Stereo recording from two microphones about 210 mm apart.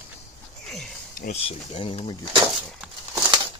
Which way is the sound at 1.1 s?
45° left (ahead or behind).